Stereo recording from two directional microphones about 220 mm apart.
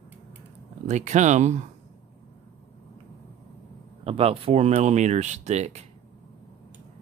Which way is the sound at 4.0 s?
25° right (ahead or behind).